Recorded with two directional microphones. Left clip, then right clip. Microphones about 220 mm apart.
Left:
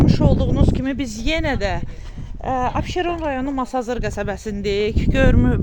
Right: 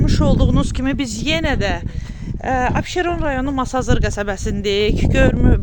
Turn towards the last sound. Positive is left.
turn(degrees=-5)  # may be behind; listen again after turning